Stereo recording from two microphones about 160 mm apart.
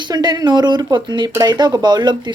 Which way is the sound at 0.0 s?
25° right (ahead or behind).